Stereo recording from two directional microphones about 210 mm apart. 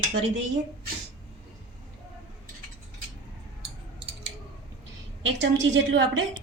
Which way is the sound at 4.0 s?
30° right (ahead or behind).